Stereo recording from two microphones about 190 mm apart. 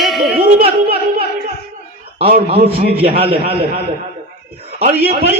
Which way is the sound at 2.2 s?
30° right (ahead or behind).